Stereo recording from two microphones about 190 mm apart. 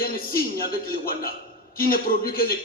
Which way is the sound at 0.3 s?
50° left (ahead or behind).